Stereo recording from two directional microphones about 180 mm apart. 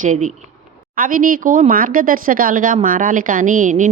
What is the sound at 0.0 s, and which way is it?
A woman's voice, 45° right (ahead or behind).